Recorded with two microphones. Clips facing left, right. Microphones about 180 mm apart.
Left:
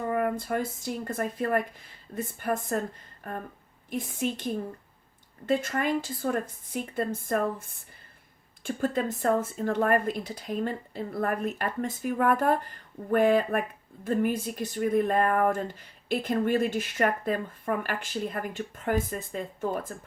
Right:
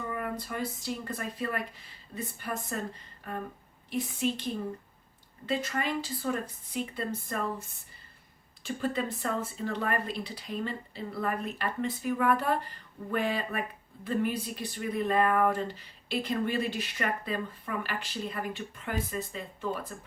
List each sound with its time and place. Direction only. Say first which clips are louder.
0.1 s speech: left 8 dB; 50° left (ahead or behind)
3.8 s speech: even; 50° left (ahead or behind)
5.5 s speech: left 5 dB; 50° left (ahead or behind)